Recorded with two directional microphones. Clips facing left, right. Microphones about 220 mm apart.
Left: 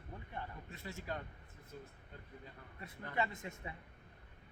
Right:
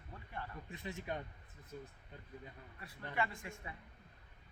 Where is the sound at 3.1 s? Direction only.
20° left (ahead or behind).